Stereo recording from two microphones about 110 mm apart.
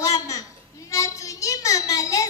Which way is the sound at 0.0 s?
30° left (ahead or behind).